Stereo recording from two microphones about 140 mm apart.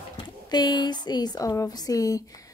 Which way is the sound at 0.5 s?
30° left (ahead or behind).